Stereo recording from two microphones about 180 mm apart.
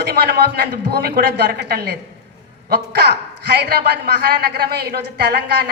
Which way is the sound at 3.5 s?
60° right (ahead or behind).